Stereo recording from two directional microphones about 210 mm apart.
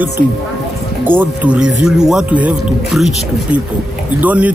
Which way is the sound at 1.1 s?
10° right (ahead or behind).